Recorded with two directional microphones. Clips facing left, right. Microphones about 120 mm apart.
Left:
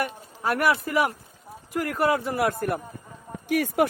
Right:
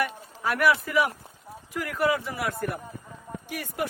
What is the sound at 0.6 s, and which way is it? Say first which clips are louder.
A man's voice: right 1 dB; 50° left (ahead or behind).